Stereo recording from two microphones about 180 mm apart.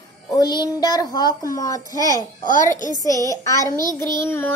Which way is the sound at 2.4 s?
45° left (ahead or behind).